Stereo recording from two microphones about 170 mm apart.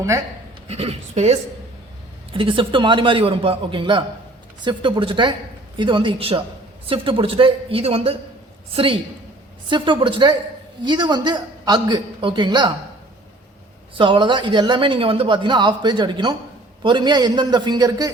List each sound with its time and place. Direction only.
0.7 s a woman's voice: 35° right (ahead or behind)
13.9 s speech: 30° right (ahead or behind)